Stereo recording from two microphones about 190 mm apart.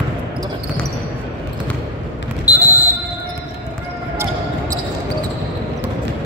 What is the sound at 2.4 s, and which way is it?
Basketball bounce, 20° left (ahead or behind).